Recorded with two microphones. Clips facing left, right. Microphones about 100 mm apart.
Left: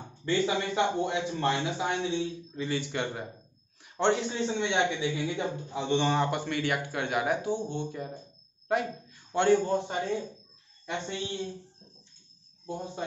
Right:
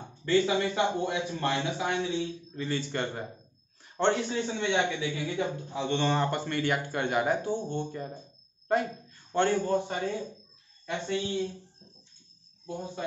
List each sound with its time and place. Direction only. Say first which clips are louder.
0.2 s a man's voice: right 3 dB; 20° left (ahead or behind)
2.5 s a man's voice: right 1 dB; 5° left (ahead or behind); by 11.4 s 25° left (ahead or behind)
12.6 s a man's voice: even; 25° left (ahead or behind)